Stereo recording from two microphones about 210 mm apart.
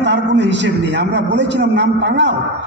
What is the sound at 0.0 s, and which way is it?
A man's voice, 55° right (ahead or behind).